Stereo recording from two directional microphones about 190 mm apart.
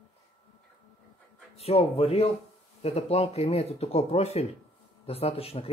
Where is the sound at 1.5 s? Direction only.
30° left (ahead or behind).